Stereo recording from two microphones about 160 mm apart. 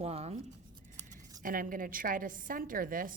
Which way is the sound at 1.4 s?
60° right (ahead or behind).